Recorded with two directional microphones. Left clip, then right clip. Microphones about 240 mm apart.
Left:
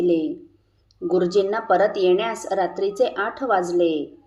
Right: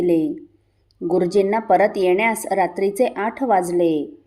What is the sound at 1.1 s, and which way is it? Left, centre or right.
Speech, right.